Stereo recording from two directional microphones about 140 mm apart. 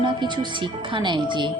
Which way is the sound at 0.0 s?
35° right (ahead or behind).